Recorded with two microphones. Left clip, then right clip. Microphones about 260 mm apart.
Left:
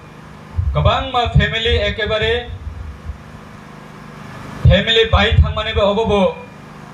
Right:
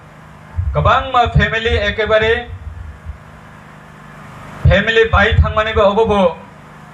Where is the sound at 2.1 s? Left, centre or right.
Left.